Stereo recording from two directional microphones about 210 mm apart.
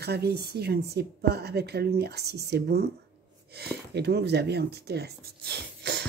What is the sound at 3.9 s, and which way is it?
Speech, 50° right (ahead or behind).